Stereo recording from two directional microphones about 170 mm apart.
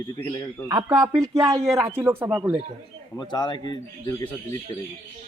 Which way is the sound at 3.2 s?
25° left (ahead or behind).